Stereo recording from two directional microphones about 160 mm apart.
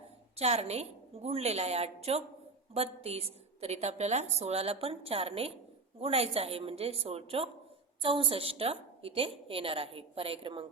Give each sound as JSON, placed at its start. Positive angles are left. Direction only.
{"t": 0.3, "sound": "a woman's voice", "side_deg": -40}